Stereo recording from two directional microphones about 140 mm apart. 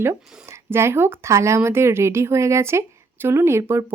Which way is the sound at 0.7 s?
20° right (ahead or behind).